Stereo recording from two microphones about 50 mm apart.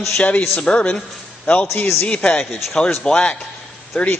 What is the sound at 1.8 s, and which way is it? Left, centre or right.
Speech, left.